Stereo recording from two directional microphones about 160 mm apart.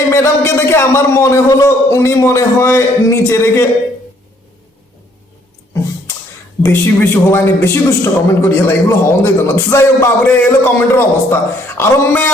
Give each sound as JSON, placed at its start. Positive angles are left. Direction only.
{"t": 0.1, "sound": "a man's voice", "side_deg": 15}
{"t": 6.6, "sound": "a man's voice", "side_deg": 10}